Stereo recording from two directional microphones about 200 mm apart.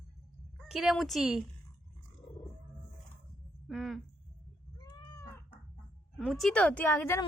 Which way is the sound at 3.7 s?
Centre (ahead or behind).